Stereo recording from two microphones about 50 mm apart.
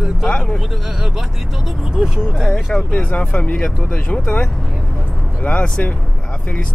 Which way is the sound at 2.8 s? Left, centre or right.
Left.